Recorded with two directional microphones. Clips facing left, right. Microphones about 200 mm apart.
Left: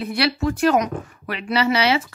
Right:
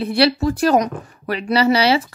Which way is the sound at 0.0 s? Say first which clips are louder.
Right 5 dB; 30° right (ahead or behind).